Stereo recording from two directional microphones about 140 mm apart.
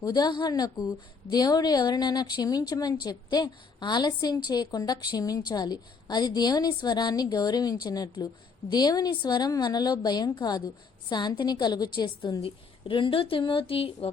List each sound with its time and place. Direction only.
0.0 s a woman's voice: 30° left (ahead or behind)